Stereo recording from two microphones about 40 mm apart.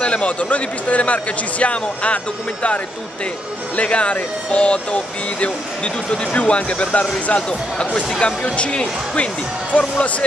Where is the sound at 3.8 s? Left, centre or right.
Left.